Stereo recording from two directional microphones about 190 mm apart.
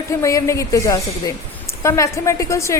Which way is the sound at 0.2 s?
15° left (ahead or behind).